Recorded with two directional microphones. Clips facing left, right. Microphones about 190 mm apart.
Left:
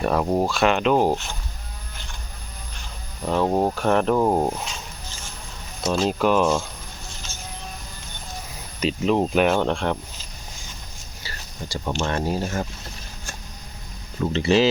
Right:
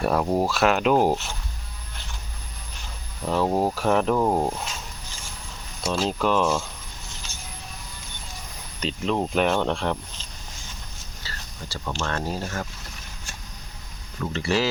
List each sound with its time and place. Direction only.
0.0 s speech: centre (ahead or behind)
3.2 s speech: centre (ahead or behind)
4.1 s speech: 10° left (ahead or behind)
5.9 s speech: 5° left (ahead or behind)
8.8 s speech: 10° left (ahead or behind)
11.2 s speech: 15° left (ahead or behind)
14.2 s speech: 20° left (ahead or behind)